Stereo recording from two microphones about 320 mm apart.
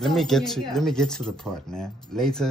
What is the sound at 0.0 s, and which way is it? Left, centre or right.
Speech, centre.